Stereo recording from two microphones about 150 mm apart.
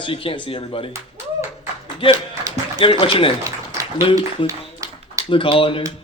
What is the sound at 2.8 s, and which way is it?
Speech, 35° left (ahead or behind).